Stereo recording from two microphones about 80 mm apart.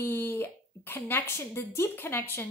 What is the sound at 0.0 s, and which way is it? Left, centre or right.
A woman's voice, left.